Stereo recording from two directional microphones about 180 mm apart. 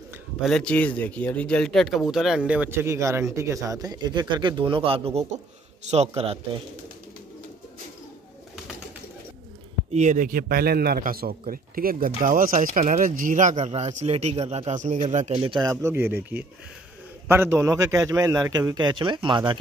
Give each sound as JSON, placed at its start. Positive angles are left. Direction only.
{"t": 0.4, "sound": "a man's voice", "side_deg": 5}
{"t": 9.9, "sound": "a man's voice", "side_deg": -45}
{"t": 15.6, "sound": "a man's voice", "side_deg": -15}